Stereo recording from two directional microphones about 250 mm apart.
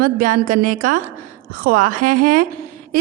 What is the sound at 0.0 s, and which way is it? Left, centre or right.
A woman's voice, right.